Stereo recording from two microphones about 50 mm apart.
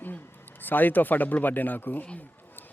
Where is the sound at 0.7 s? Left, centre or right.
Left.